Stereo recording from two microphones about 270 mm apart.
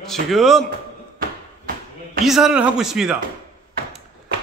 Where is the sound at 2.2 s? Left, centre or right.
Centre.